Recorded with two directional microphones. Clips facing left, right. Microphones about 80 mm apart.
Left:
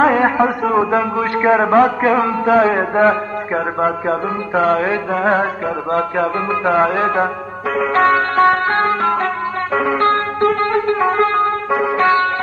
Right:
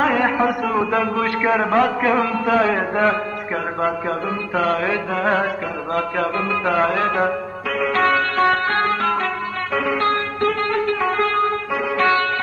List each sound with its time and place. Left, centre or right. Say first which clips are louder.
0.0 s a man's voice: left 4 dB; left
9.8 s music: left 4 dB; left